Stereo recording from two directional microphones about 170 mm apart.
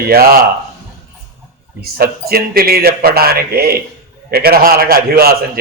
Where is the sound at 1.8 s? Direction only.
65° right (ahead or behind).